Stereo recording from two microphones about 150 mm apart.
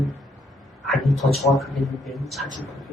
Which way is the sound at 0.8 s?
Centre (ahead or behind).